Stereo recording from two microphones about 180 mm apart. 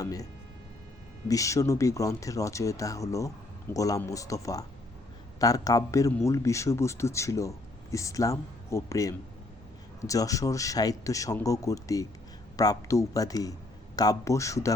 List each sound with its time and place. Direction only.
0.0 s a man's voice: 20° left (ahead or behind)
1.3 s a man's voice: 15° left (ahead or behind)